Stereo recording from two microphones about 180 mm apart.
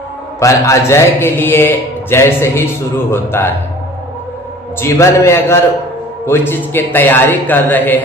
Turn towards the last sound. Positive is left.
turn(degrees=10)  # may be behind; listen again after turning